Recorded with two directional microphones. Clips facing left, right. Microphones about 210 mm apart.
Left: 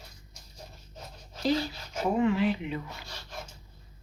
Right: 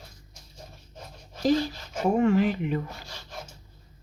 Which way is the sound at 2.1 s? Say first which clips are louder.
Right 4 dB; 45° right (ahead or behind).